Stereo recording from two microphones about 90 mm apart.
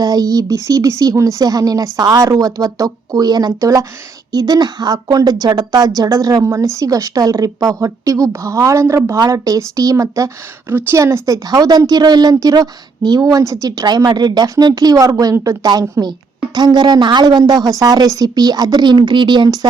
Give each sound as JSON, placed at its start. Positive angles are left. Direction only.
{"t": 0.0, "sound": "a woman's voice", "side_deg": -45}
{"t": 10.7, "sound": "a woman's voice", "side_deg": -25}